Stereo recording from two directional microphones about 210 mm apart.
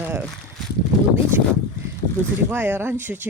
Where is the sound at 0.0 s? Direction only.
10° right (ahead or behind).